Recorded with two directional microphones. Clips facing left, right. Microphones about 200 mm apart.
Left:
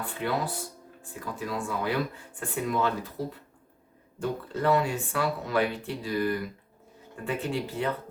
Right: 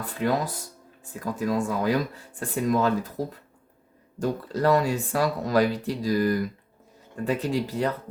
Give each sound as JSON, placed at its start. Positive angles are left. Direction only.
{"t": 0.0, "sound": "speech", "side_deg": -40}